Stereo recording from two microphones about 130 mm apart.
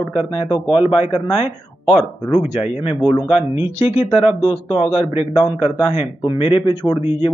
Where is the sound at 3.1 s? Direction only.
35° left (ahead or behind).